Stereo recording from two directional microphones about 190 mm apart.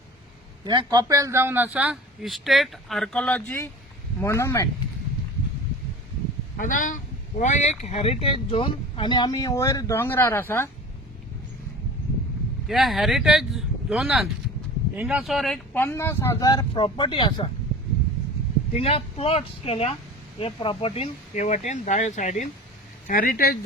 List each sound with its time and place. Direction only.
0.6 s a man's voice: 25° right (ahead or behind); by 4.7 s 15° left (ahead or behind)
6.6 s speech: 45° left (ahead or behind); by 10.7 s 10° left (ahead or behind)
12.6 s speech: centre (ahead or behind); by 17.5 s 25° left (ahead or behind)
18.7 s speech: 30° left (ahead or behind); by 23.6 s 50° left (ahead or behind)